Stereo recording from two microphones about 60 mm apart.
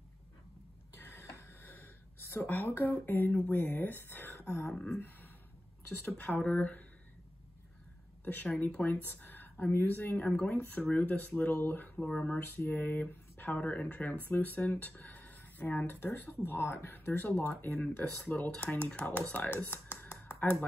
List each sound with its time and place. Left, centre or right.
0.9 s a sound: left
4.6 s speech: centre
6.0 s speech: left
8.2 s speech: left
10.1 s speech: centre
19.1 s a sound: left